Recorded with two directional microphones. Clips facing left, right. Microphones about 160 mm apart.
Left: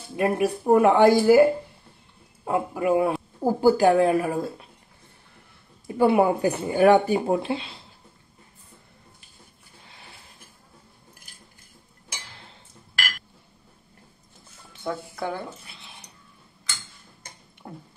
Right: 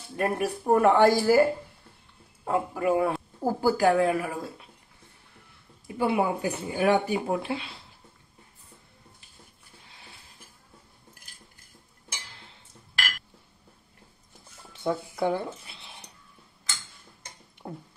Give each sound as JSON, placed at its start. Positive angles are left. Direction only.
{"t": 0.1, "sound": "speech", "side_deg": 10}
{"t": 3.7, "sound": "speech", "side_deg": 25}
{"t": 5.9, "sound": "speech", "side_deg": 50}
{"t": 7.1, "sound": "speech", "side_deg": 30}
{"t": 14.8, "sound": "speech", "side_deg": -10}
{"t": 17.6, "sound": "a sound", "side_deg": -20}